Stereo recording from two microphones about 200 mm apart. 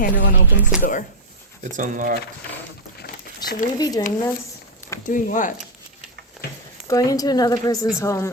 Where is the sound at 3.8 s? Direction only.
20° left (ahead or behind).